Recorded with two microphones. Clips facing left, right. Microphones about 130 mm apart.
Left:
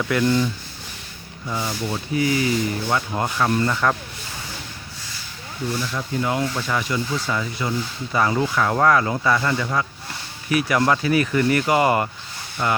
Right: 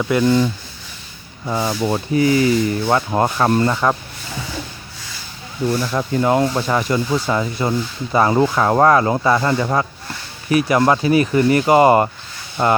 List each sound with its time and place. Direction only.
0.0 s speech: 20° right (ahead or behind)
0.3 s speech: 30° right (ahead or behind)
2.8 s speech: 55° right (ahead or behind)
3.2 s speech: 35° right (ahead or behind)
5.6 s speech: 40° right (ahead or behind)